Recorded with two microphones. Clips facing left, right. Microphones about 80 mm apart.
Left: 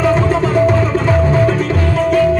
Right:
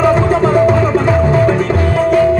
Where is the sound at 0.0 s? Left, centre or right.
Centre.